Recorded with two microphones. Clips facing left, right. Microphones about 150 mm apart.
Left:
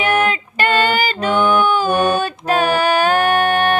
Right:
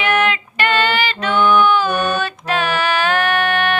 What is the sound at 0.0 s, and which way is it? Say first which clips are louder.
Female singing: left 1 dB; 40° left (ahead or behind).